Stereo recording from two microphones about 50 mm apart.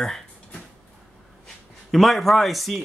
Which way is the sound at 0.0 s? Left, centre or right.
Centre.